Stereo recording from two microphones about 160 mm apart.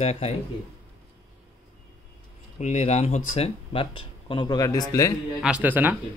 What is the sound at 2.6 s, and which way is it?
Speech, 45° left (ahead or behind).